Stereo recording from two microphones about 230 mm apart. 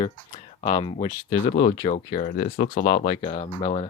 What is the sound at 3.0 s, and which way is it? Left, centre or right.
Speech, left.